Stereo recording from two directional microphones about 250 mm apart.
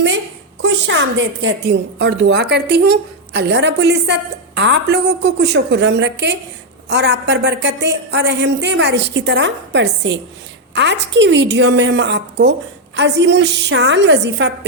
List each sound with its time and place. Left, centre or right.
0.6 s a woman's voice: right